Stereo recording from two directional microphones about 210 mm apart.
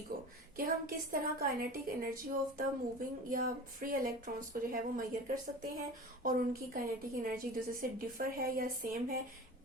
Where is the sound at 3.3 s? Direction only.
40° right (ahead or behind).